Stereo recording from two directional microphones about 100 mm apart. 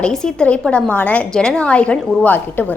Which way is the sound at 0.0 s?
5° left (ahead or behind).